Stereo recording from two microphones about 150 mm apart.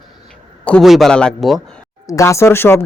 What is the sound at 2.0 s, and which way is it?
Speech, 20° left (ahead or behind).